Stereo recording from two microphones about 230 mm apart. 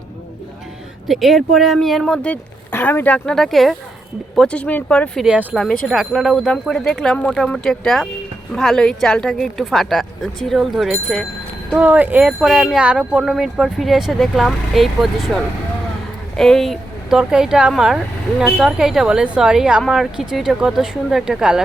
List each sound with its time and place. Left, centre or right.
1.0 s speech: centre